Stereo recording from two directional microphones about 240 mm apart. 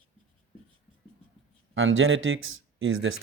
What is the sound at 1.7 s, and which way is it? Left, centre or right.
Speech, right.